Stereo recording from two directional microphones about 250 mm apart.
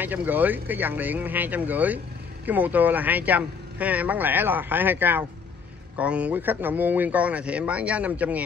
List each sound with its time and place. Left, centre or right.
0.0 s speech: centre